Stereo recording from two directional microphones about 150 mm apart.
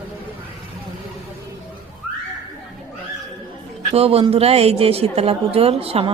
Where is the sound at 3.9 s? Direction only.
40° right (ahead or behind).